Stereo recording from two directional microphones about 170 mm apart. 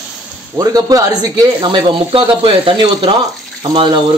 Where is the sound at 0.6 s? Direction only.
20° right (ahead or behind).